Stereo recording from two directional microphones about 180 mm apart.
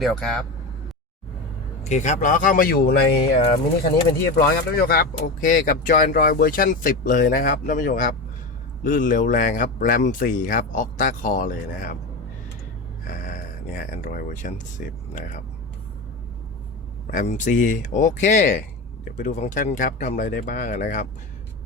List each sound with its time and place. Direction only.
0.0 s speech: centre (ahead or behind)
1.8 s speech: 40° left (ahead or behind)
13.7 s speech: 50° left (ahead or behind)
17.1 s speech: 45° left (ahead or behind)